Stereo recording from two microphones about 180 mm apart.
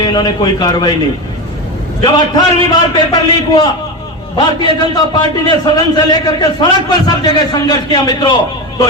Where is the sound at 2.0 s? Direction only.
25° left (ahead or behind).